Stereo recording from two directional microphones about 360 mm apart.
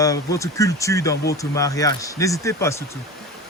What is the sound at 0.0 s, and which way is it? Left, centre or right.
Speech, centre.